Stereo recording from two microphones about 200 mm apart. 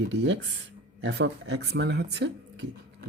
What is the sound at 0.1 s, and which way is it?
Speech, 60° right (ahead or behind).